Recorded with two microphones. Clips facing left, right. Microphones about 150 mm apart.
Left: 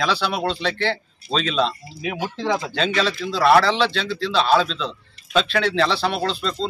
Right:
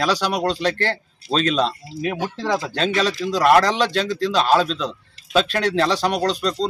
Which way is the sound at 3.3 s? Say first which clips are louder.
Even; 40° right (ahead or behind).